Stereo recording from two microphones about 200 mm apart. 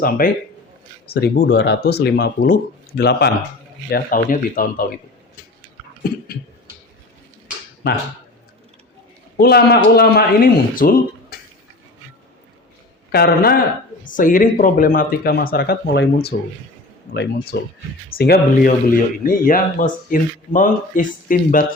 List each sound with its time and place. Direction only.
0.2 s speech: 45° left (ahead or behind)
9.4 s speech: 50° left (ahead or behind)
13.1 s speech: 50° left (ahead or behind)